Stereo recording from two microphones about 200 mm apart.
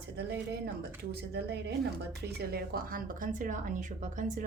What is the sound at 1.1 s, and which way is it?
A woman's voice, 55° right (ahead or behind).